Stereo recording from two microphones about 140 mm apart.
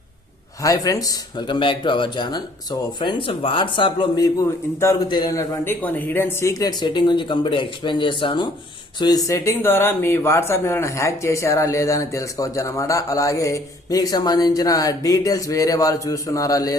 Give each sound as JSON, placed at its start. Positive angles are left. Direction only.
{"t": 0.6, "sound": "speech", "side_deg": 25}
{"t": 4.8, "sound": "speech", "side_deg": 20}
{"t": 5.8, "sound": "speech", "side_deg": 15}